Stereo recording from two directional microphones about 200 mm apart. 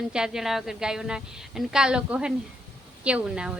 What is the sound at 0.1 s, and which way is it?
Speech, 5° right (ahead or behind).